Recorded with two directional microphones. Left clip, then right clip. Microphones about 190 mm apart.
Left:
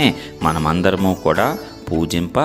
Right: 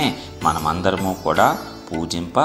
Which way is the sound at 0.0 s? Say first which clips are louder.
Left 2 dB; 45° left (ahead or behind).